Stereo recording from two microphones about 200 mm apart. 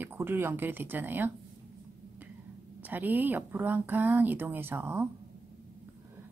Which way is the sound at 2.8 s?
10° right (ahead or behind).